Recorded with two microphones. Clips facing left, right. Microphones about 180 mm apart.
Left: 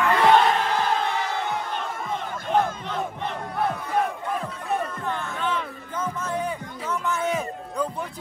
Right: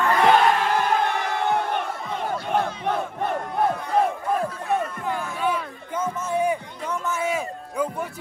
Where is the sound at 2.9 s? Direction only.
60° right (ahead or behind).